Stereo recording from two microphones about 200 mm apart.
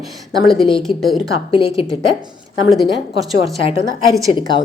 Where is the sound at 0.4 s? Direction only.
Centre (ahead or behind).